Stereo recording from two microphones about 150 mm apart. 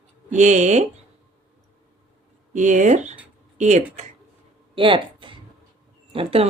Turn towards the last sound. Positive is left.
turn(degrees=-40)  # may be behind; listen again after turning